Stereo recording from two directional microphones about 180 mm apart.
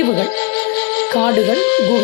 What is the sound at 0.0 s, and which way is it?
Music, 40° left (ahead or behind).